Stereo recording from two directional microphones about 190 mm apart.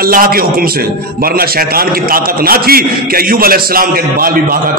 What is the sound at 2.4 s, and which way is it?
A man's voice, 50° right (ahead or behind).